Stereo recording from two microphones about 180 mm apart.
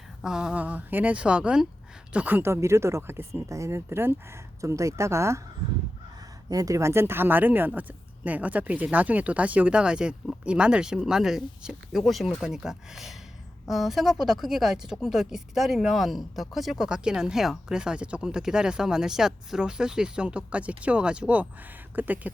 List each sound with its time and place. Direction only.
0.2 s speech: 5° right (ahead or behind)
6.5 s speech: 20° right (ahead or behind)